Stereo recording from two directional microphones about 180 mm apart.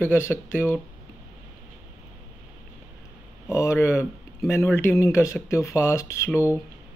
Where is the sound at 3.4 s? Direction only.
15° left (ahead or behind).